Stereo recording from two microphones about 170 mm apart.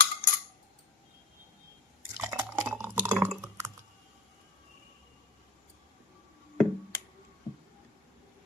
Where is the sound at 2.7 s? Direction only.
15° right (ahead or behind).